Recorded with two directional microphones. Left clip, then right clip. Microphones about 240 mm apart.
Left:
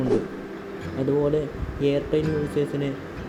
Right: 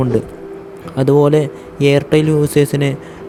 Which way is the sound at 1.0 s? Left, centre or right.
Right.